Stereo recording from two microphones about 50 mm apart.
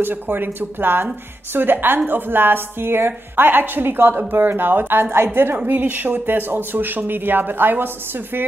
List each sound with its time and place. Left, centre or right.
0.0 s a woman's voice: right
5.1 s a woman's voice: right
5.7 s speech: right